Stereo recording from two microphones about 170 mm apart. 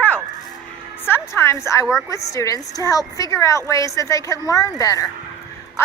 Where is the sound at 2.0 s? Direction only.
20° left (ahead or behind).